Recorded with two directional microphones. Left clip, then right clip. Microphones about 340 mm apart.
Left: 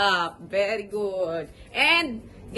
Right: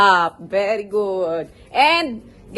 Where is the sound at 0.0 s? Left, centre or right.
Centre.